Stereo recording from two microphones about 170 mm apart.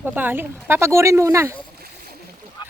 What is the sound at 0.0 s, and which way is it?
Speech, 10° right (ahead or behind).